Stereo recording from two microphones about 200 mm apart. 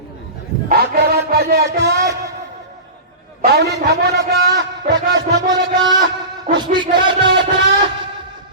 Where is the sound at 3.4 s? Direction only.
55° right (ahead or behind).